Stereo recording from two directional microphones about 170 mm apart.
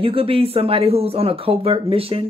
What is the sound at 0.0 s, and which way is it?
Speech, 35° right (ahead or behind).